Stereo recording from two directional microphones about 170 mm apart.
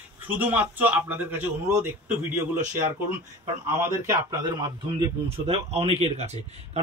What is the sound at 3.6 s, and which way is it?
Speech, 15° right (ahead or behind).